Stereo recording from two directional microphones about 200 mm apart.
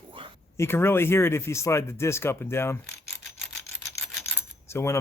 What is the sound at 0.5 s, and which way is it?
Speech, 15° left (ahead or behind).